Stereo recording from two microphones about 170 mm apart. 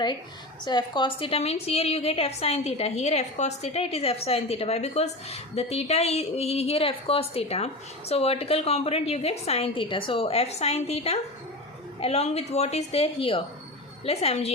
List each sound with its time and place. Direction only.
0.6 s a woman's voice: 25° left (ahead or behind)